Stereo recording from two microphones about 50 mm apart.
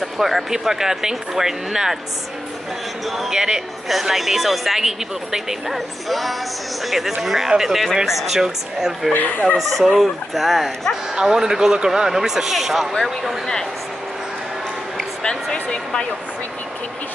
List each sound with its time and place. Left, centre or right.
0.0 s speech: centre
3.1 s speech: centre
11.1 s speech: centre
15.5 s speech: left